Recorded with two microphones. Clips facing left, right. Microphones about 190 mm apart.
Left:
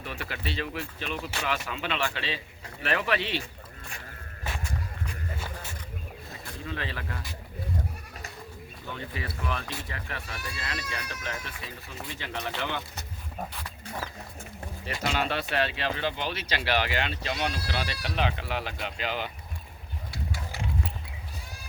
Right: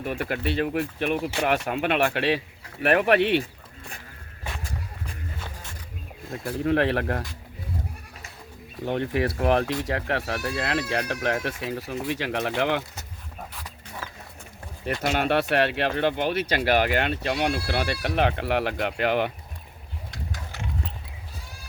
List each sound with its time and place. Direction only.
0.0 s speech: 50° right (ahead or behind)
6.3 s speech: 65° right (ahead or behind)
8.8 s speech: 70° right (ahead or behind)
15.0 s speech: 55° right (ahead or behind)
20.1 s a sound: 10° left (ahead or behind)